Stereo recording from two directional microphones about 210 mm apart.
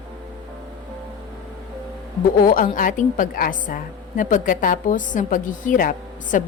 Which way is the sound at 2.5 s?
40° left (ahead or behind).